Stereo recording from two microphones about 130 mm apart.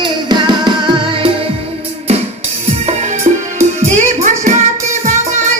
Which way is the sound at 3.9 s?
70° right (ahead or behind).